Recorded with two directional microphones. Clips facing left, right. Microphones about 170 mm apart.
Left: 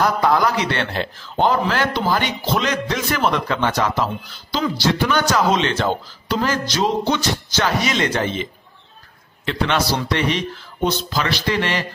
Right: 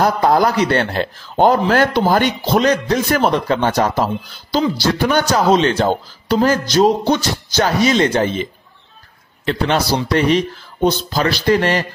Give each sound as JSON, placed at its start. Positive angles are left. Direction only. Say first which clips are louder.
{"t": 0.0, "sound": "a man's voice", "louder": "right 3 dB", "side_deg": -40}
{"t": 10.1, "sound": "a man's voice", "louder": "right 6 dB", "side_deg": -40}